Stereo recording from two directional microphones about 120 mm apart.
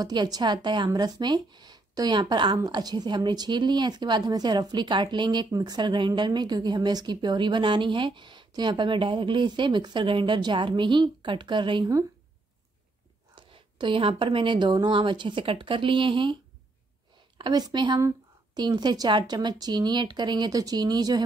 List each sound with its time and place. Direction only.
0.0 s speech: 35° right (ahead or behind)
13.3 s speech: 40° right (ahead or behind)
17.4 s speech: 35° right (ahead or behind)